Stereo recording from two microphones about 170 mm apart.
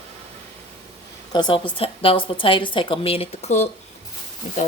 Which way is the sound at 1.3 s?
25° left (ahead or behind).